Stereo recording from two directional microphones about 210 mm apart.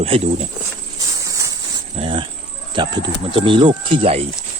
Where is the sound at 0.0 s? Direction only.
30° right (ahead or behind).